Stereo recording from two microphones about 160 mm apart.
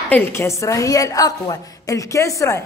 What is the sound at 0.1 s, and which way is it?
A woman's voice, 15° left (ahead or behind).